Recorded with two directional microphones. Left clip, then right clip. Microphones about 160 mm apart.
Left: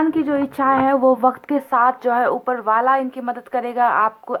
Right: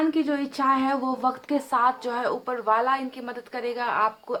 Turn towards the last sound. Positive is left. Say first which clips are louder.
# left 6 dB
turn(degrees=35)  # may be behind; listen again after turning